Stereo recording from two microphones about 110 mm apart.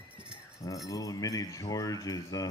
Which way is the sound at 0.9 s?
30° left (ahead or behind).